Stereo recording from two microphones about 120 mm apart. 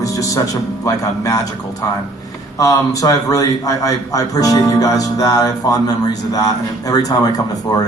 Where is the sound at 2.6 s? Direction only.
30° left (ahead or behind).